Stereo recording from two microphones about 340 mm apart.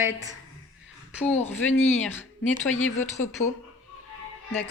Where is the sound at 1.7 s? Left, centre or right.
Centre.